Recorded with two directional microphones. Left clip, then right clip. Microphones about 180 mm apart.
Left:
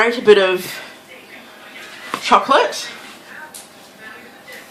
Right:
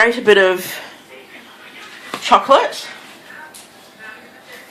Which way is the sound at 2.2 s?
25° right (ahead or behind).